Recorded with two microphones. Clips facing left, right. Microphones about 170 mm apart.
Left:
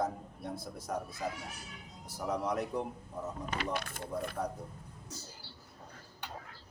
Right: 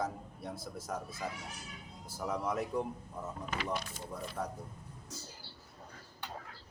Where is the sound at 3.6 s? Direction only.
60° left (ahead or behind).